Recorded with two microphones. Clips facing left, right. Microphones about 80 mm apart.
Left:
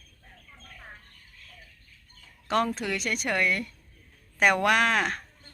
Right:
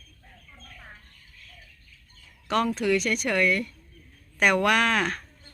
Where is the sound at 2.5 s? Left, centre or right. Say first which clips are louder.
Right 3 dB; left.